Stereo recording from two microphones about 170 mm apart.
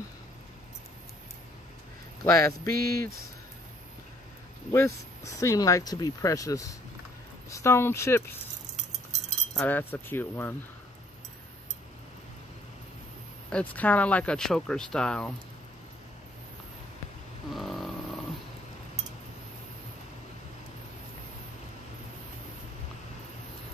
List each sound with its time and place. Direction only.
2.2 s speech: 20° left (ahead or behind)
4.7 s speech: 15° left (ahead or behind)
9.5 s speech: 10° left (ahead or behind)
13.5 s speech: 10° left (ahead or behind)
17.6 s a sound: centre (ahead or behind)